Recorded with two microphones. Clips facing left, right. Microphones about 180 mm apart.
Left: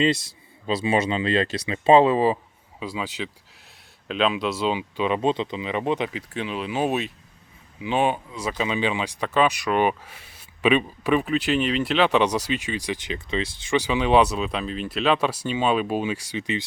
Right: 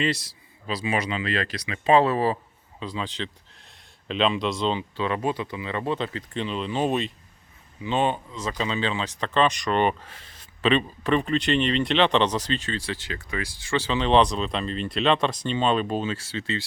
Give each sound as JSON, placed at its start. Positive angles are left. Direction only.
{"t": 0.0, "sound": "speech", "side_deg": 20}